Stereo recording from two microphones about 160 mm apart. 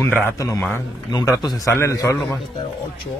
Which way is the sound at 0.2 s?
20° left (ahead or behind).